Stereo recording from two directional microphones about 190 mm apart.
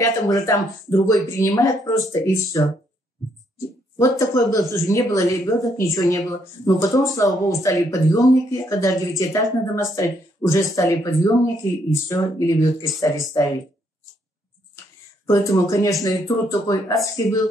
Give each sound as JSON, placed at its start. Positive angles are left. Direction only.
{"t": 0.0, "sound": "speech", "side_deg": 15}
{"t": 15.2, "sound": "speech", "side_deg": 15}